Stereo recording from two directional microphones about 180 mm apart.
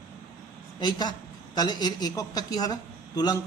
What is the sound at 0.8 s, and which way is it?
A man's voice, 25° left (ahead or behind).